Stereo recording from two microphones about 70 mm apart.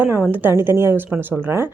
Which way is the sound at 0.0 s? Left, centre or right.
Right.